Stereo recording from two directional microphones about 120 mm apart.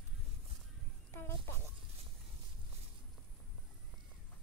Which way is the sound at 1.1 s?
20° left (ahead or behind).